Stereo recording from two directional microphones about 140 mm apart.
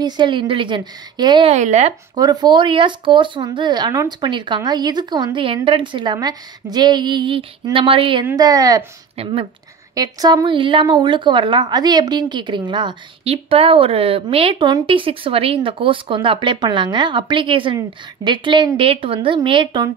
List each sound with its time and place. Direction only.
0.0 s a woman's voice: 35° right (ahead or behind)
1.5 s speech: 55° right (ahead or behind)
2.1 s a woman's voice: 30° right (ahead or behind)
8.4 s speech: 25° right (ahead or behind)
9.1 s speech: 45° right (ahead or behind)
9.9 s a woman's voice: 30° right (ahead or behind)